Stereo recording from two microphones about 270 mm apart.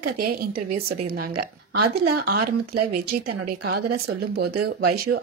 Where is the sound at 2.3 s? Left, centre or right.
Right.